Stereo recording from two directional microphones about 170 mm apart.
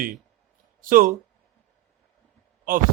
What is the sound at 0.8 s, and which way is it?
Speech, 55° right (ahead or behind).